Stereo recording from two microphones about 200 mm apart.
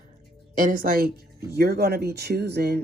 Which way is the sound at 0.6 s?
45° right (ahead or behind).